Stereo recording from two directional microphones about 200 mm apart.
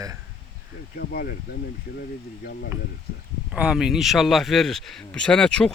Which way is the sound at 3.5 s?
5° right (ahead or behind).